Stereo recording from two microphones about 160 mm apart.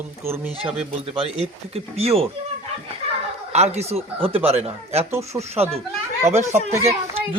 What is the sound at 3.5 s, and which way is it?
Speech, 45° right (ahead or behind).